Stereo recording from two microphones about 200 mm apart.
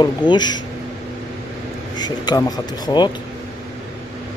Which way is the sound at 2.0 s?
20° left (ahead or behind).